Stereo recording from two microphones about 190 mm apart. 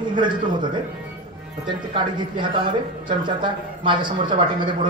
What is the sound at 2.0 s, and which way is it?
Speech, 25° right (ahead or behind).